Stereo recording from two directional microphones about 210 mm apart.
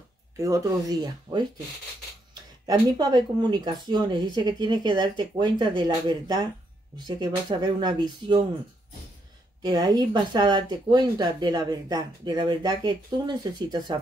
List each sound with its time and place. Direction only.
0.4 s speech: 15° right (ahead or behind)
2.6 s speech: 20° right (ahead or behind)
9.6 s speech: 20° right (ahead or behind)